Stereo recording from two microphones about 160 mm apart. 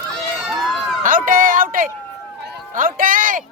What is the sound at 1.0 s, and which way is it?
Speech, 55° right (ahead or behind).